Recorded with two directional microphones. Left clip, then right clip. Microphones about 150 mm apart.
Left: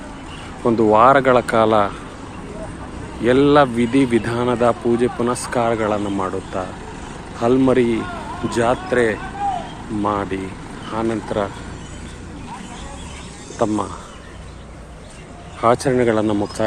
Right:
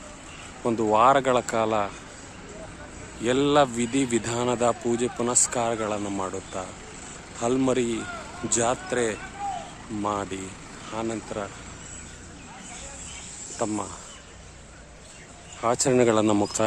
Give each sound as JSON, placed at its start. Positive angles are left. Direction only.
{"t": 0.8, "sound": "speech", "side_deg": -20}
{"t": 3.2, "sound": "speech", "side_deg": -25}
{"t": 13.6, "sound": "speech", "side_deg": -25}
{"t": 15.6, "sound": "speech", "side_deg": -25}
{"t": 15.9, "sound": "speech", "side_deg": -45}